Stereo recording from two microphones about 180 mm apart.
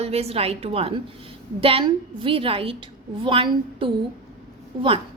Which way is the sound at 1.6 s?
30° right (ahead or behind).